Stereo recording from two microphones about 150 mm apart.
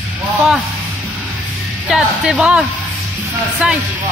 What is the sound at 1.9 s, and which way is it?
Speech, 5° right (ahead or behind).